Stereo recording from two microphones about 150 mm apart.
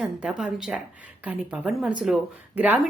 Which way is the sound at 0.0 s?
5° right (ahead or behind).